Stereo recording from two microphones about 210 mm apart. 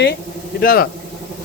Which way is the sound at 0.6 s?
45° left (ahead or behind).